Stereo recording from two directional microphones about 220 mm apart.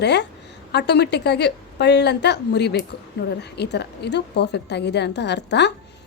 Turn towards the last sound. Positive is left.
turn(degrees=50)  # may be behind; listen again after turning